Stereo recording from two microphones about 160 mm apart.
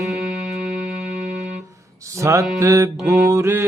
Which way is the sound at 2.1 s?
20° right (ahead or behind).